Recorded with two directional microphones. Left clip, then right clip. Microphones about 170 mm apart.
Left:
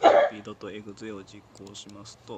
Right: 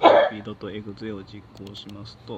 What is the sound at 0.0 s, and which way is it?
Throat clearing, 10° left (ahead or behind).